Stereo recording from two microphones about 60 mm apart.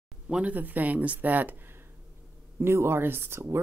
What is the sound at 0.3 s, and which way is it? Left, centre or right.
Speech, right.